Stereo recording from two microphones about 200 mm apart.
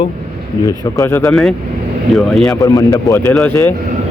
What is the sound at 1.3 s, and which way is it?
Speech, centre (ahead or behind).